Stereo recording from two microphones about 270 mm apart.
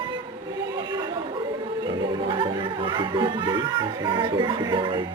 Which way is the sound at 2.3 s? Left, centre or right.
Centre.